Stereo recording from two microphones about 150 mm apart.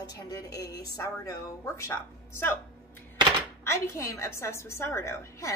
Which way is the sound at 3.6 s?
20° left (ahead or behind).